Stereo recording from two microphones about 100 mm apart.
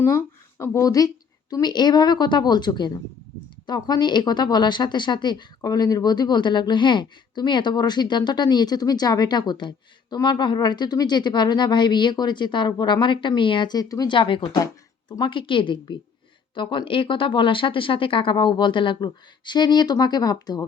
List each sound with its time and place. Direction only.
0.0 s speech: 30° left (ahead or behind)
14.1 s speech: 55° left (ahead or behind); by 20.7 s 40° left (ahead or behind)